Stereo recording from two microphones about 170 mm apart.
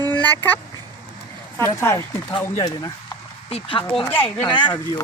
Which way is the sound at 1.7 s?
15° left (ahead or behind).